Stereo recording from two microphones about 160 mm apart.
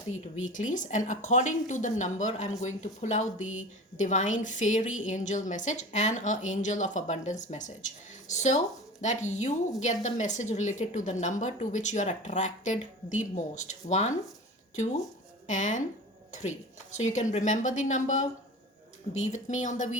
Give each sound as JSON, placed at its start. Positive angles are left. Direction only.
{"t": 0.4, "sound": "a woman's voice", "side_deg": 55}
{"t": 15.4, "sound": "a woman's voice", "side_deg": 50}